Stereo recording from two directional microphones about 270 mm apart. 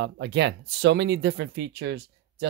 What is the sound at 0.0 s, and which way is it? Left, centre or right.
Speech, right.